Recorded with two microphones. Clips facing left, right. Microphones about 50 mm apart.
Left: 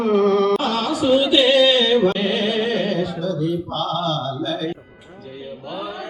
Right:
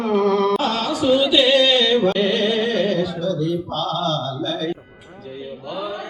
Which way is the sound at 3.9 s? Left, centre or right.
Centre.